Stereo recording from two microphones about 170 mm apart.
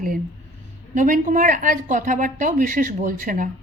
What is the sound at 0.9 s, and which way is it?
Speech, 50° right (ahead or behind).